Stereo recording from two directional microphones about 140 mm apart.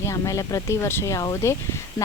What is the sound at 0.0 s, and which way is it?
Speech, 20° left (ahead or behind).